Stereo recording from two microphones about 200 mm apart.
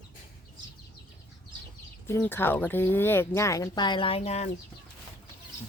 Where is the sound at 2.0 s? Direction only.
10° left (ahead or behind); by 4.5 s 30° left (ahead or behind).